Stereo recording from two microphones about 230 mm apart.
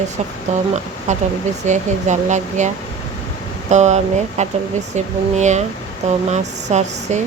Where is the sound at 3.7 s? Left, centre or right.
Right.